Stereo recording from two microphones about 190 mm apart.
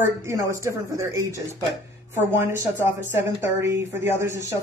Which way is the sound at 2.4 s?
15° right (ahead or behind).